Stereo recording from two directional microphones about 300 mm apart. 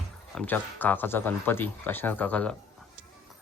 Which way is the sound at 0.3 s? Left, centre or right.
Centre.